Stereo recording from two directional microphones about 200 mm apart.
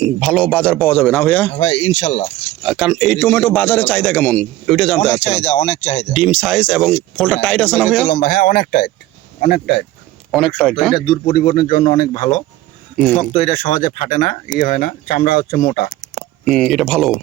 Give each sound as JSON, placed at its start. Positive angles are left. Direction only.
{"t": 0.0, "sound": "a man's voice", "side_deg": 5}
{"t": 1.5, "sound": "speech", "side_deg": 30}
{"t": 2.6, "sound": "a man's voice", "side_deg": -5}
{"t": 5.2, "sound": "speech", "side_deg": 30}
{"t": 6.1, "sound": "speech", "side_deg": 0}
{"t": 8.0, "sound": "speech", "side_deg": 50}
{"t": 10.3, "sound": "speech", "side_deg": 0}
{"t": 11.3, "sound": "speech", "side_deg": 45}
{"t": 13.3, "sound": "speech", "side_deg": 35}
{"t": 16.4, "sound": "speech", "side_deg": 0}